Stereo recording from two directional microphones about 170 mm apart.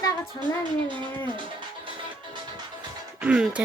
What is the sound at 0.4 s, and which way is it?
Music, 25° left (ahead or behind).